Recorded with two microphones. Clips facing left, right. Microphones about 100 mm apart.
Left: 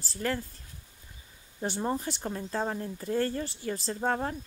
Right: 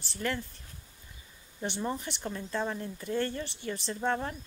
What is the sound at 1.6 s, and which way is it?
Speech, 40° left (ahead or behind).